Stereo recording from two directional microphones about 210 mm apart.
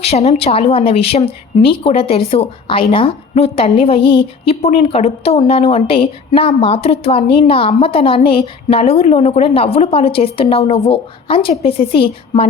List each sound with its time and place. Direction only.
0.0 s a woman's voice: 30° left (ahead or behind)